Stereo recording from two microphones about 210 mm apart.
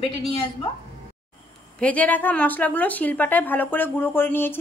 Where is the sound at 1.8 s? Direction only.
5° left (ahead or behind).